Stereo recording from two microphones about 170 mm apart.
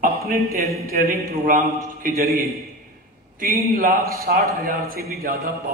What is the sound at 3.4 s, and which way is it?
A man's voice, 60° right (ahead or behind).